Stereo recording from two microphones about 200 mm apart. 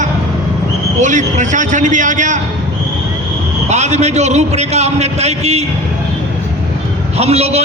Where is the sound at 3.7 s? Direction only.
35° right (ahead or behind).